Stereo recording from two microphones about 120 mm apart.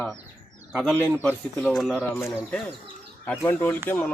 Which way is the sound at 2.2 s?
20° left (ahead or behind).